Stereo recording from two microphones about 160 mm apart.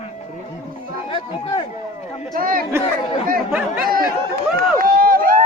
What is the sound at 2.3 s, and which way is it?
Speech, 60° right (ahead or behind).